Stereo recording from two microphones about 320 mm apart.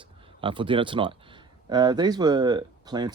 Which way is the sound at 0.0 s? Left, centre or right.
Centre.